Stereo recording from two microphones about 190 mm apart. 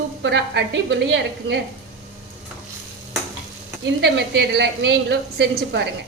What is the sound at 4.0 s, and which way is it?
A woman's voice, 65° right (ahead or behind).